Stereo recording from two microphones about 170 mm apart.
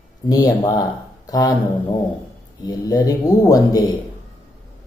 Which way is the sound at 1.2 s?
20° left (ahead or behind).